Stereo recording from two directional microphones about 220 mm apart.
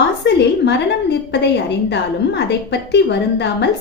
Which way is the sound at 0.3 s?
50° left (ahead or behind).